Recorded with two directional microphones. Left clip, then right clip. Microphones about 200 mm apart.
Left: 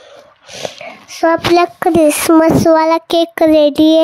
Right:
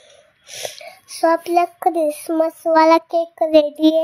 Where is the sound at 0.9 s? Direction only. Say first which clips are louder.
Left 4 dB; 20° left (ahead or behind); by 2.7 s 40° left (ahead or behind).